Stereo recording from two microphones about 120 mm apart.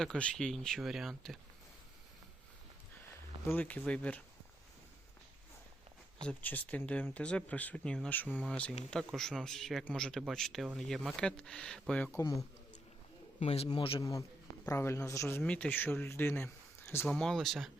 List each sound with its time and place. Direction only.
0.0 s speech: 5° left (ahead or behind)
3.4 s speech: 15° left (ahead or behind)
6.2 s speech: 15° left (ahead or behind)
12.1 s a man's voice: 25° left (ahead or behind)
13.4 s a man's voice: 60° left (ahead or behind)
13.7 s a man's voice: 45° left (ahead or behind)
14.0 s a man's voice: 25° left (ahead or behind)
15.4 s speech: 10° left (ahead or behind)
17.1 s speech: 5° left (ahead or behind)